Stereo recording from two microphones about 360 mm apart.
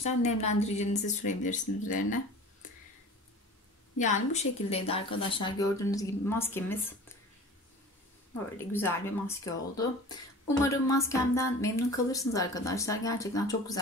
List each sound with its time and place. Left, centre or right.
0.0 s a woman's voice: centre
4.0 s speech: centre
8.7 s speech: centre